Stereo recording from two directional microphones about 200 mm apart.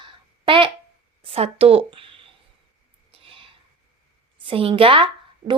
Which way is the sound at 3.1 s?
30° right (ahead or behind).